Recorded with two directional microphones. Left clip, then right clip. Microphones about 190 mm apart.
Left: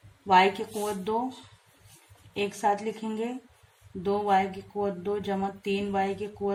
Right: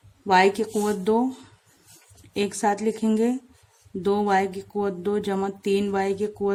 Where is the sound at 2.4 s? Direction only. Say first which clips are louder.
Right 3 dB; 35° right (ahead or behind).